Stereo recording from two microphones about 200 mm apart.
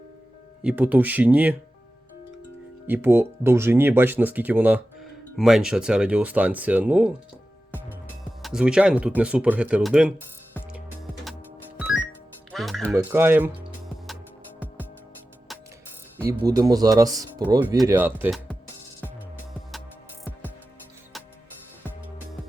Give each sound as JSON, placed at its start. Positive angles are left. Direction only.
{"t": 0.6, "sound": "speech", "side_deg": -5}
{"t": 2.8, "sound": "speech", "side_deg": -10}
{"t": 8.4, "sound": "speech", "side_deg": 0}
{"t": 11.8, "sound": "music", "side_deg": -5}
{"t": 12.8, "sound": "speech", "side_deg": -10}
{"t": 16.5, "sound": "speech", "side_deg": -20}